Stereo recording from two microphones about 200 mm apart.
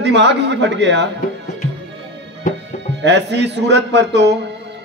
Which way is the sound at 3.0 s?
60° right (ahead or behind).